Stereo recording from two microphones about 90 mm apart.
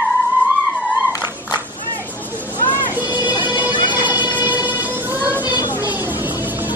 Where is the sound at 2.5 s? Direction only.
20° left (ahead or behind).